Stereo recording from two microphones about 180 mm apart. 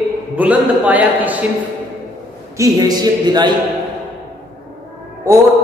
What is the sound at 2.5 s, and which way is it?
Speech, 20° right (ahead or behind).